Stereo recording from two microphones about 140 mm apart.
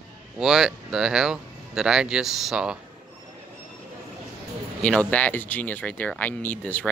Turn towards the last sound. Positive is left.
turn(degrees=10)  # may be behind; listen again after turning